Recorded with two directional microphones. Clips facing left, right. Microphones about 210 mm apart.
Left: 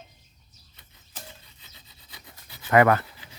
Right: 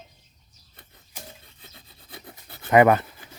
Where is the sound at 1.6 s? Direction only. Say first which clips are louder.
Right 5 dB; 55° right (ahead or behind).